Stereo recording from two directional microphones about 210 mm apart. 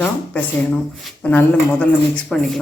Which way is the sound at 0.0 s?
5° left (ahead or behind).